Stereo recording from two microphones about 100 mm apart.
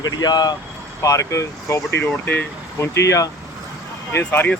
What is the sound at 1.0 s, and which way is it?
Speech, 30° left (ahead or behind).